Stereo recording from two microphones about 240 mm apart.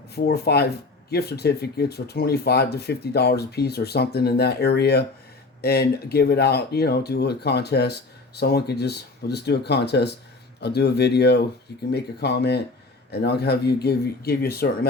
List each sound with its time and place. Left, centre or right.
0.1 s speech: left